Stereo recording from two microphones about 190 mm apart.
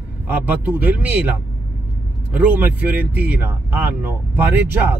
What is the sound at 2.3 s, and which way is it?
Speech, 10° right (ahead or behind).